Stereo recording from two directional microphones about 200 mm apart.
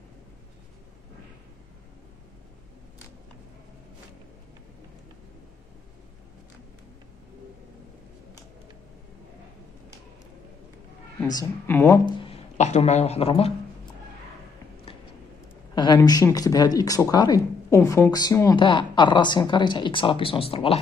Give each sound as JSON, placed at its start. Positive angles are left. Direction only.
{"t": 11.2, "sound": "a woman's voice", "side_deg": 15}
{"t": 12.2, "sound": "speech", "side_deg": 30}
{"t": 15.7, "sound": "speech", "side_deg": 20}